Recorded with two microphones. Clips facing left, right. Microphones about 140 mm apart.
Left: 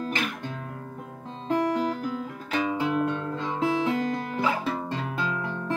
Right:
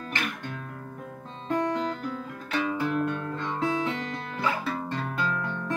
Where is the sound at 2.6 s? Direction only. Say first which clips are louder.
Left 2 dB; 15° left (ahead or behind).